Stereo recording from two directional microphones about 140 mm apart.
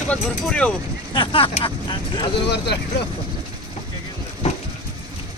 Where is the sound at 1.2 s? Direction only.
40° left (ahead or behind).